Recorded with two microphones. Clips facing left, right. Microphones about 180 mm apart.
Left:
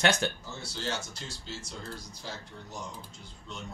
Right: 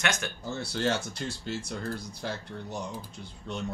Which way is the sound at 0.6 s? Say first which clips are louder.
Right 7 dB; 60° right (ahead or behind).